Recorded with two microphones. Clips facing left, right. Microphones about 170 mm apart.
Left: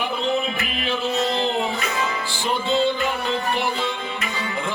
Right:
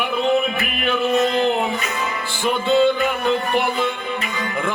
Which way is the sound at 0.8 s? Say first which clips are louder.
Right 6 dB; 55° right (ahead or behind).